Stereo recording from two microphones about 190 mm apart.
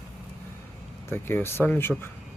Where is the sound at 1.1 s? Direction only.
10° left (ahead or behind).